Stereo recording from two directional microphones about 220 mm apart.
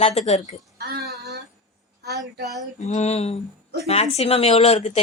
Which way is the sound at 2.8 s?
30° left (ahead or behind).